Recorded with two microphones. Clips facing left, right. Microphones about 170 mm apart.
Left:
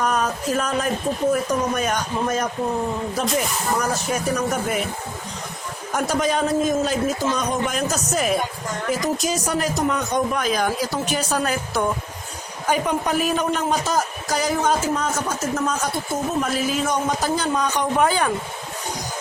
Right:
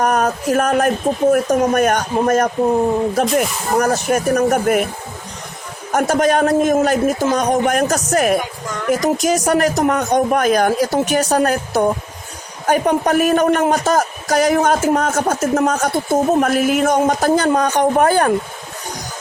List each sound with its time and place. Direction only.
0.0 s a man's voice: 55° right (ahead or behind)
5.9 s a man's voice: 60° right (ahead or behind)
11.3 s a man's voice: 50° right (ahead or behind)
15.4 s a man's voice: 80° right; by 18.3 s 50° right (ahead or behind)